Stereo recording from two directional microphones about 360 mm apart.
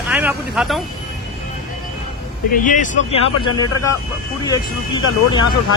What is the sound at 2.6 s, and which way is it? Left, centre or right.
Speech, left.